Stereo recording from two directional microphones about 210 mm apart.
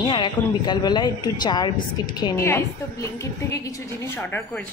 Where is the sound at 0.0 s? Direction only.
20° left (ahead or behind).